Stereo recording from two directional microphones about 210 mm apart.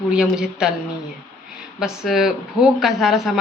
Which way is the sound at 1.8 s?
Centre (ahead or behind).